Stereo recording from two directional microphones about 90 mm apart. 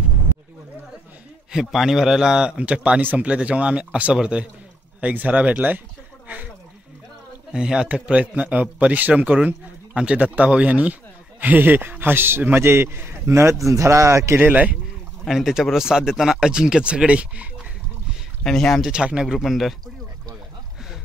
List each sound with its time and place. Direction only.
1.5 s a man's voice: 5° right (ahead or behind)
6.2 s a sound: 20° right (ahead or behind)
7.5 s a man's voice: 10° right (ahead or behind); by 14.4 s 30° right (ahead or behind)
14.4 s a man's voice: 15° right (ahead or behind)
15.2 s a man's voice: 5° right (ahead or behind)
18.4 s speech: 5° left (ahead or behind)
18.9 s a man's voice: 10° right (ahead or behind)